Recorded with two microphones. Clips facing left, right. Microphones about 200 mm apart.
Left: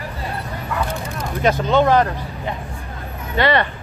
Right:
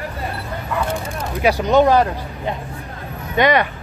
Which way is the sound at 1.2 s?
10° right (ahead or behind).